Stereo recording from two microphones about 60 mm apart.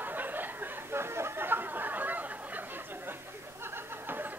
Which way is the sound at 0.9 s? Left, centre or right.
Right.